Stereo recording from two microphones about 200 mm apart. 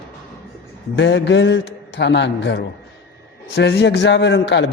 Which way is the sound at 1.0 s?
65° left (ahead or behind).